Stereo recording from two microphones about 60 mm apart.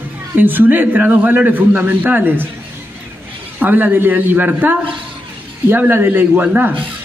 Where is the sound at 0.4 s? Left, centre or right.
Right.